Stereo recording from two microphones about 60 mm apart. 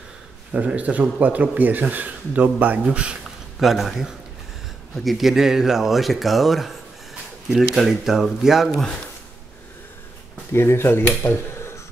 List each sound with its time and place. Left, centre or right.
0.5 s a man's voice: right
3.5 s speech: centre
8.6 s speech: centre
10.5 s speech: left